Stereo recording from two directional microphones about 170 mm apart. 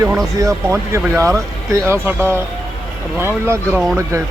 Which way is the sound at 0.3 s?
20° right (ahead or behind).